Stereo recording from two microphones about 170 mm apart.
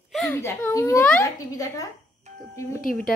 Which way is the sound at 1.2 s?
20° left (ahead or behind).